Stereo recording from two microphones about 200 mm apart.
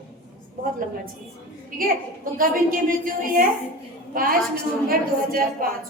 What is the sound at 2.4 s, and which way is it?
A woman's voice, 45° right (ahead or behind).